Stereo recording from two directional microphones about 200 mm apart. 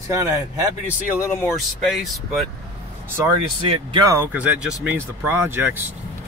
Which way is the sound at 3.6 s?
25° right (ahead or behind).